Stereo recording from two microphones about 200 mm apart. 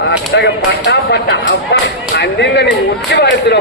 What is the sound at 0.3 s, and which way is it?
A man's voice, 60° left (ahead or behind).